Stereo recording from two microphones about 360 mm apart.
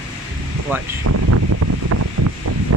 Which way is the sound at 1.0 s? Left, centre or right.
Right.